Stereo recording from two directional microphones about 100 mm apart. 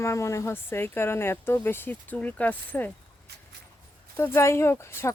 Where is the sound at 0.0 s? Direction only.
30° left (ahead or behind).